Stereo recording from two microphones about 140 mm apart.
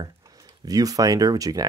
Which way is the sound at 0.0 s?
25° right (ahead or behind).